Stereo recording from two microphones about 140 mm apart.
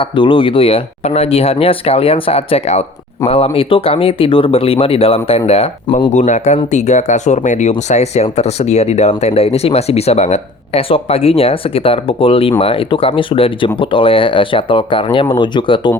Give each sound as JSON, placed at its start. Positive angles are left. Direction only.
{"t": 0.0, "sound": "speech", "side_deg": 35}
{"t": 6.1, "sound": "speech", "side_deg": 60}